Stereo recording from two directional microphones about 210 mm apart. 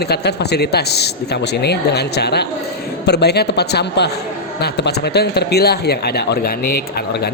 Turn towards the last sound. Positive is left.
turn(degrees=50)  # may be behind; listen again after turning